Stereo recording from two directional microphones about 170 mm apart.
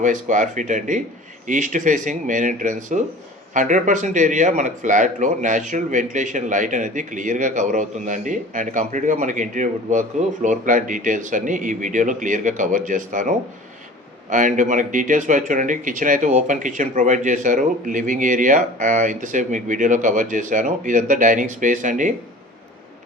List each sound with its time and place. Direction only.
0.0 s speech: 50° right (ahead or behind)